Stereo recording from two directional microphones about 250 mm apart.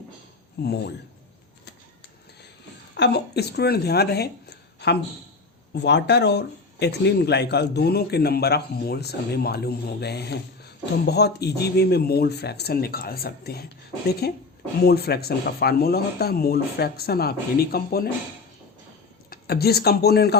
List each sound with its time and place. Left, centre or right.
0.6 s speech: left
2.9 s speech: left
19.3 s speech: left